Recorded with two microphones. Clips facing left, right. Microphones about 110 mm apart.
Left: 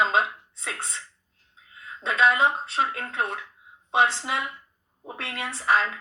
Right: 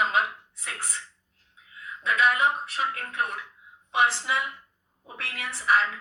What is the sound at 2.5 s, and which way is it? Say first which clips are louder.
A woman's voice: left 3 dB; 90° left.